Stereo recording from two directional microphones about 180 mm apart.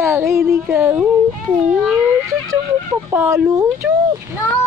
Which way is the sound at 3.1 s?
15° right (ahead or behind).